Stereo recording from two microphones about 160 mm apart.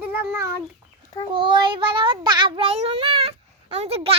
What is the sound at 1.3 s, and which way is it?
Speech, 30° right (ahead or behind).